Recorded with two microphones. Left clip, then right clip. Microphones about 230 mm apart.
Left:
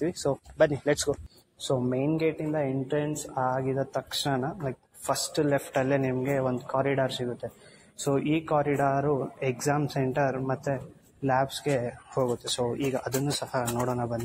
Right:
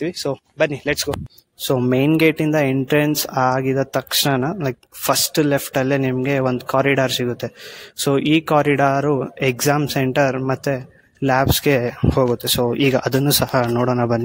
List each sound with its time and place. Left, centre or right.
0.0 s speech: right
1.7 s speech: right
7.1 s speech: right
12.6 s speech: right
13.5 s speech: right